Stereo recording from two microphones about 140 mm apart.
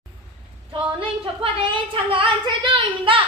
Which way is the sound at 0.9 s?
40° right (ahead or behind).